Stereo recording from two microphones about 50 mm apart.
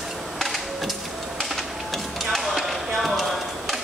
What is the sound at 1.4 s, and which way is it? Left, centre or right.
Music, centre.